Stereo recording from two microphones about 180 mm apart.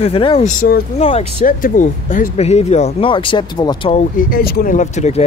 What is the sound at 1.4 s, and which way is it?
Speech, 45° left (ahead or behind).